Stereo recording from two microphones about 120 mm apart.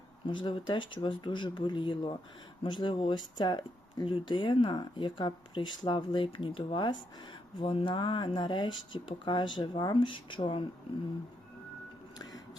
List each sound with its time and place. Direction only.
0.3 s speech: 45° left (ahead or behind)